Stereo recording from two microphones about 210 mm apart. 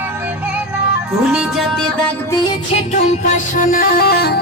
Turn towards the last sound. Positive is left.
turn(degrees=50)  # may be behind; listen again after turning